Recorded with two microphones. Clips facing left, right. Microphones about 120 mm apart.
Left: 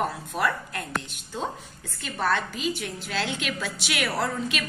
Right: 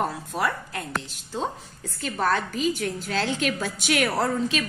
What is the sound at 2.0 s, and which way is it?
A woman's voice, 40° right (ahead or behind).